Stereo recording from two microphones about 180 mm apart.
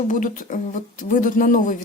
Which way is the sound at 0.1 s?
45° left (ahead or behind).